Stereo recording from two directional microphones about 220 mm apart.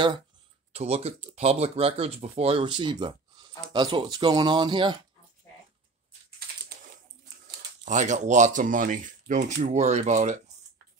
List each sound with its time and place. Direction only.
0.7 s speech: 30° right (ahead or behind)
7.8 s speech: 35° right (ahead or behind)